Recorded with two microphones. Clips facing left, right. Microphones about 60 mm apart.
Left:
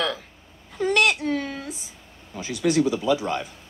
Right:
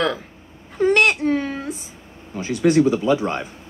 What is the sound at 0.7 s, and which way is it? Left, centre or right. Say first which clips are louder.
Speech: right 4 dB; right.